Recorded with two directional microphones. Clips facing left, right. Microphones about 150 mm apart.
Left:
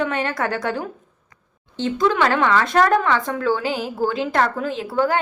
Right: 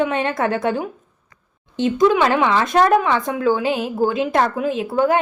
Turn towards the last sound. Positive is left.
turn(degrees=-20)  # may be behind; listen again after turning